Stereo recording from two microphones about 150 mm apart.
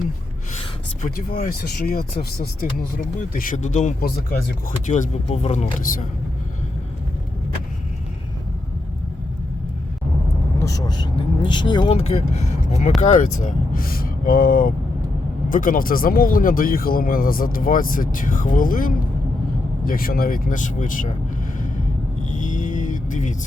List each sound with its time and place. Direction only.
1.0 s speech: 70° left (ahead or behind); by 5.9 s 50° left (ahead or behind)
10.6 s speech: 25° left (ahead or behind); by 21.1 s 60° left (ahead or behind)
22.3 s music: 55° left (ahead or behind)